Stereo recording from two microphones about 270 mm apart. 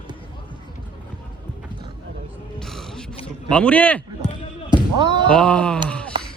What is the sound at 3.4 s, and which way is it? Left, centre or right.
Speech, centre.